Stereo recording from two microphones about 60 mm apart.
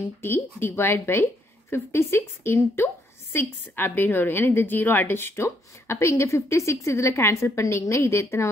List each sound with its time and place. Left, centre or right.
0.0 s a woman's voice: left